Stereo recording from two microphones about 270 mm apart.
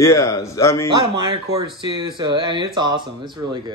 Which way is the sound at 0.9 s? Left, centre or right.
Centre.